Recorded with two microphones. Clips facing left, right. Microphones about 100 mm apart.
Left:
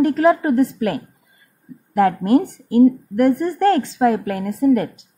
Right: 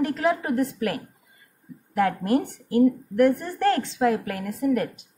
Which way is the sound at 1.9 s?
45° left (ahead or behind).